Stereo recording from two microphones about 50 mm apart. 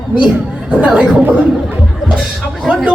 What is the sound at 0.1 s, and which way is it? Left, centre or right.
Speech, right.